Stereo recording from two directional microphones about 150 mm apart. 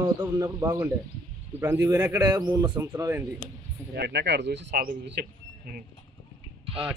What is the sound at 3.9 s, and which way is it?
Speech, 90° right.